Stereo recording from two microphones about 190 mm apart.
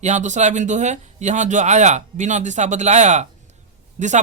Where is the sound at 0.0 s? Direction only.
40° right (ahead or behind).